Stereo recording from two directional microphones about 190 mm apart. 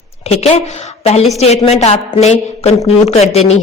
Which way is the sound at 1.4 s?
35° left (ahead or behind).